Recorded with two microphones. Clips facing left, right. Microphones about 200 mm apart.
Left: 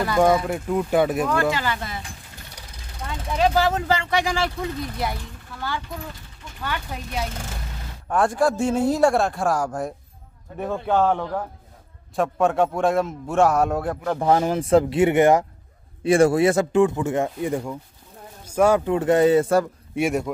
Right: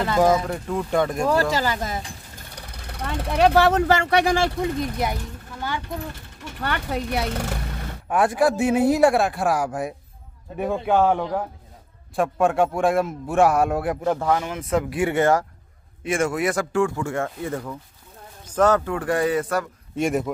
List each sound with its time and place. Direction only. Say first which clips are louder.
0.2 s a man's voice: left 1 dB; centre (ahead or behind)
1.2 s speech: right 2 dB; 35° right (ahead or behind)
2.7 s speech: right 4 dB; 65° right (ahead or behind)
4.6 s speech: right 3 dB; 20° right (ahead or behind)
6.4 s speech: right 3 dB; 65° right (ahead or behind)
8.1 s a man's voice: right 1 dB; 10° right (ahead or behind)
12.2 s a man's voice: even; centre (ahead or behind)
14.2 s a man's voice: left 4 dB; 35° left (ahead or behind); by 15.4 s 20° left (ahead or behind)
16.0 s a man's voice: left 7 dB; 35° left (ahead or behind); by 18.9 s 10° left (ahead or behind)
18.9 s a man's voice: left 5 dB; 25° left (ahead or behind)
20.0 s a man's voice: even; centre (ahead or behind)